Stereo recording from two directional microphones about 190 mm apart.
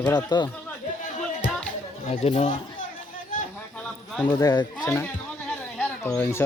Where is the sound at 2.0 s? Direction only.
35° left (ahead or behind).